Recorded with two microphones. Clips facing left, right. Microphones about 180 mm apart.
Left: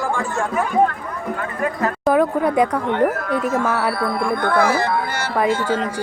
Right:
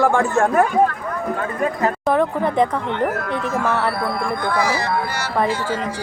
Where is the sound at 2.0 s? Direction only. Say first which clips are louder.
Left 4 dB; 5° left (ahead or behind).